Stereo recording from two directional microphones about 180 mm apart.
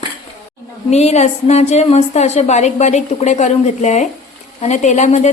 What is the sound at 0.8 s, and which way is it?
A woman's voice, 40° left (ahead or behind).